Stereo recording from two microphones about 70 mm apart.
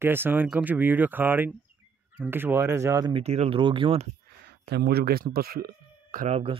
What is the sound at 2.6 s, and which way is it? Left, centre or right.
Speech, right.